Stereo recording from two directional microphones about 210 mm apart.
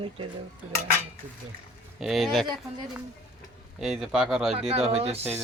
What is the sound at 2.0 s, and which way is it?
Speech, centre (ahead or behind).